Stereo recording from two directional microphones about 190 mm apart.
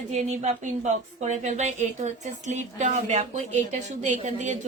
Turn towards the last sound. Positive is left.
turn(degrees=-40)  # may be behind; listen again after turning